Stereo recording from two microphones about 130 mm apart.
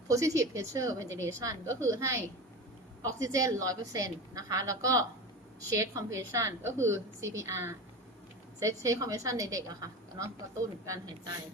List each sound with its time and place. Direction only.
0.1 s a woman's voice: 25° right (ahead or behind)